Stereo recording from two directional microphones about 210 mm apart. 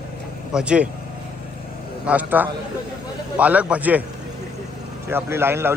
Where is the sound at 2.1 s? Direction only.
10° right (ahead or behind).